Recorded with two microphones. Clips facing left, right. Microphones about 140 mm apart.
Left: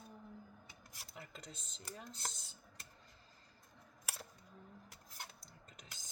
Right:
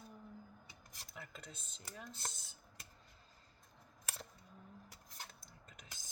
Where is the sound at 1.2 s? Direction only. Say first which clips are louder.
Even; 40° left (ahead or behind).